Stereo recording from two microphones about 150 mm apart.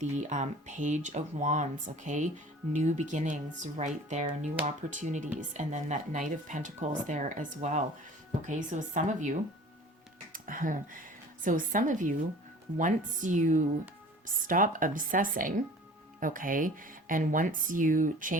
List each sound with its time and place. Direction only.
0.0 s speech: 50° right (ahead or behind)
10.3 s speech: 65° right (ahead or behind)